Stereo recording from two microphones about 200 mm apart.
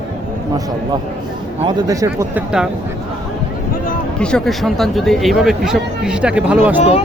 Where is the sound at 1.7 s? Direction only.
15° right (ahead or behind).